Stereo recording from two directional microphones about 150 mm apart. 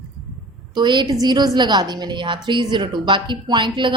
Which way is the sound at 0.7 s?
30° right (ahead or behind).